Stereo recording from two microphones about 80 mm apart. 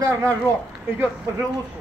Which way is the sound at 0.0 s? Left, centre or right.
Right.